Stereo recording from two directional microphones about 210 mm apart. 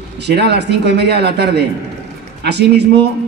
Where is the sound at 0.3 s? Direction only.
50° right (ahead or behind).